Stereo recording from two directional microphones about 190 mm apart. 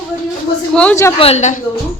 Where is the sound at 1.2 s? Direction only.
35° left (ahead or behind).